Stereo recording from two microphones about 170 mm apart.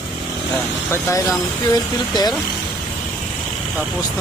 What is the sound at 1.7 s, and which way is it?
Speech, 25° left (ahead or behind).